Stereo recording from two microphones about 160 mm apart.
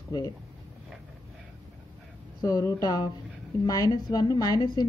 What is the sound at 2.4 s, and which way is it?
A woman's voice, 20° left (ahead or behind).